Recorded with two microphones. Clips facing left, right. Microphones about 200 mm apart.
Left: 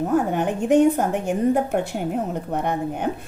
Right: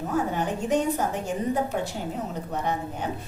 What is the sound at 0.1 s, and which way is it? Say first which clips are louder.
A woman's voice: left 3 dB; 55° left (ahead or behind).